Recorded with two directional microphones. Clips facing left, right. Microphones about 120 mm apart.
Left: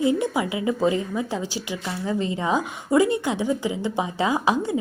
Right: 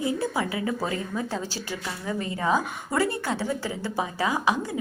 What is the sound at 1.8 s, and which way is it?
Speech, 25° left (ahead or behind).